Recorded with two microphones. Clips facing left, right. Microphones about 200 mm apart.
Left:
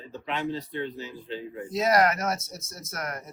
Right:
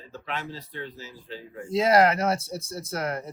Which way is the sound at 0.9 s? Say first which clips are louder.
Left 4 dB; 5° right (ahead or behind).